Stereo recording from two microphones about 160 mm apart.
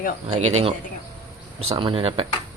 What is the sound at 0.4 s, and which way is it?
Speech, 45° right (ahead or behind).